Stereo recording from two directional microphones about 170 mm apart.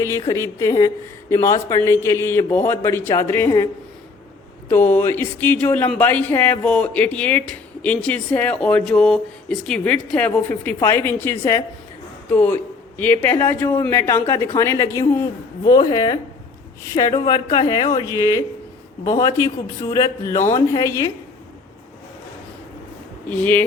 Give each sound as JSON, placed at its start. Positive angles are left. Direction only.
{"t": 0.0, "sound": "a man's voice", "side_deg": 15}
{"t": 4.7, "sound": "a man's voice", "side_deg": 10}
{"t": 23.3, "sound": "speech", "side_deg": 10}